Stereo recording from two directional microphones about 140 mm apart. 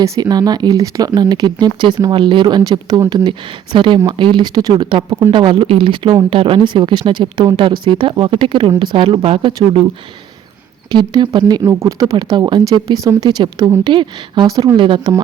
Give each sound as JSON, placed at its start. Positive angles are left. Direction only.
{"t": 0.0, "sound": "speech", "side_deg": -30}
{"t": 10.9, "sound": "speech", "side_deg": -30}
{"t": 14.8, "sound": "speech", "side_deg": -35}